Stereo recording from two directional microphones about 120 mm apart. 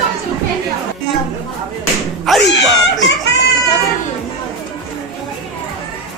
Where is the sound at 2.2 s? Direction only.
Centre (ahead or behind).